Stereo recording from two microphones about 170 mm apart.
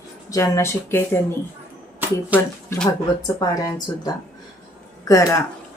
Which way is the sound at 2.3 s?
10° right (ahead or behind).